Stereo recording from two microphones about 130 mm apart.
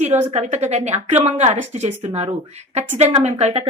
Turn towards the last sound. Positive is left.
turn(degrees=-60)  # may be behind; listen again after turning